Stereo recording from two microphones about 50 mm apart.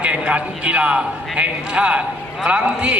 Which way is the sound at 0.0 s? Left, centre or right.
Right.